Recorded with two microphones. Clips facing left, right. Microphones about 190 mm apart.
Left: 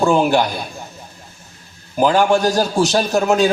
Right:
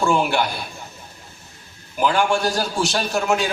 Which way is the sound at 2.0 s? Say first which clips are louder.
Left 5 dB; 40° left (ahead or behind).